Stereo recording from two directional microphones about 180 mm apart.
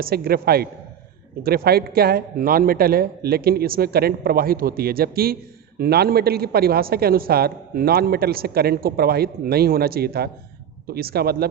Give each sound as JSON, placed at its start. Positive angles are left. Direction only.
{"t": 0.0, "sound": "a man's voice", "side_deg": -55}